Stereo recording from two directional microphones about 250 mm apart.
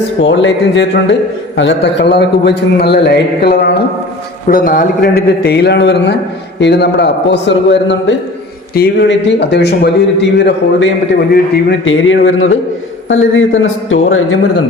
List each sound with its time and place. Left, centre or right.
0.2 s a man's voice: left